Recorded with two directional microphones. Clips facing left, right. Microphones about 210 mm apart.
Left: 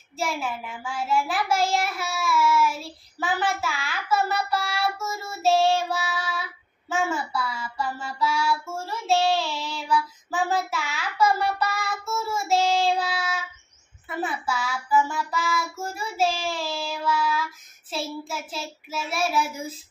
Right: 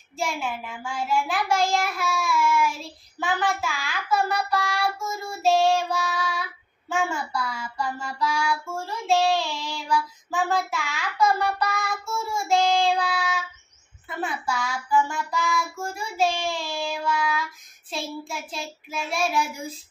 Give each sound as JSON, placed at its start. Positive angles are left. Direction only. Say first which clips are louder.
{"t": 0.2, "sound": "child singing", "louder": "even", "side_deg": 5}